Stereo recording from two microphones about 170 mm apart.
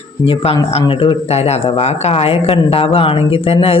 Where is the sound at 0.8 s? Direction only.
30° left (ahead or behind).